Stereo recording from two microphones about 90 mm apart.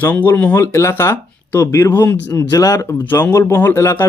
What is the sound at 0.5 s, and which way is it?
Speech, 30° left (ahead or behind).